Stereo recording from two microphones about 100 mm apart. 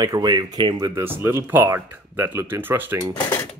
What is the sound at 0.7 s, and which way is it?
Speech, 35° right (ahead or behind).